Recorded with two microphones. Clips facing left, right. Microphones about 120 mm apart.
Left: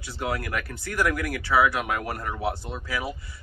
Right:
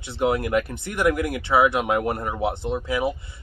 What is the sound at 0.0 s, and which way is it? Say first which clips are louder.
Speech: right 7 dB; 25° right (ahead or behind).